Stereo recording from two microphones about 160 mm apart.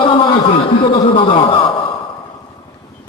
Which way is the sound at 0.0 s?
30° left (ahead or behind).